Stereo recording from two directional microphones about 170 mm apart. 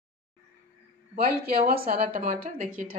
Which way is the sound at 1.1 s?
60° right (ahead or behind).